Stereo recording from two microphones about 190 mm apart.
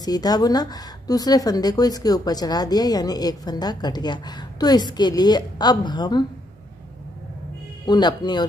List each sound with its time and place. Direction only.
0.0 s speech: 20° left (ahead or behind)
7.8 s speech: 20° left (ahead or behind)